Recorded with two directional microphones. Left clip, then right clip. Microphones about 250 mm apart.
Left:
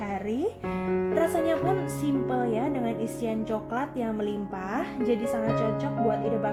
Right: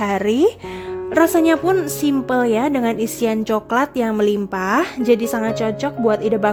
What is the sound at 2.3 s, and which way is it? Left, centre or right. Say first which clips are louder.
A woman's voice: right 10 dB; right.